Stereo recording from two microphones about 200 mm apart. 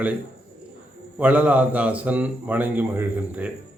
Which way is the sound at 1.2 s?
5° right (ahead or behind).